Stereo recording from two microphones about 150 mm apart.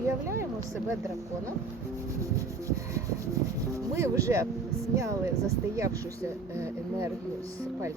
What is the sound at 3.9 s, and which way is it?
Speech, 20° right (ahead or behind).